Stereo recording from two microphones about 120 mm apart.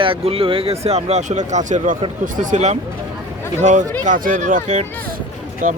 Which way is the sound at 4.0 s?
90° right.